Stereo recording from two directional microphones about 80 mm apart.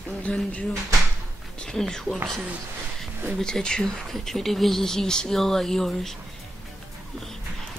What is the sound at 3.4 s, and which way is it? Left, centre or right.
Speech, centre.